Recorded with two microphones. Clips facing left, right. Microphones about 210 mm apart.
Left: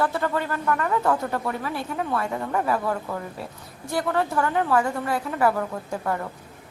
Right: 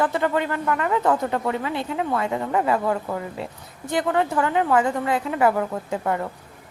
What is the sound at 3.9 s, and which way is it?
A woman's voice, 15° right (ahead or behind).